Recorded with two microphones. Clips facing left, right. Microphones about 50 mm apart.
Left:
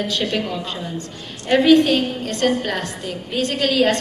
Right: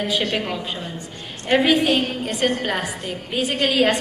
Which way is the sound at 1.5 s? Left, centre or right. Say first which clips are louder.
Left 4 dB; centre.